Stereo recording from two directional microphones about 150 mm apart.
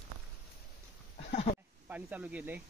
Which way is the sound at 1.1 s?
45° left (ahead or behind).